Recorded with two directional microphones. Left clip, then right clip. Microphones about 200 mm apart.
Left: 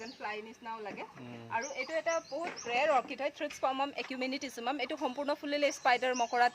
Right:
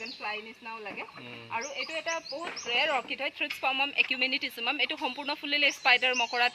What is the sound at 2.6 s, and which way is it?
Speech, 25° left (ahead or behind).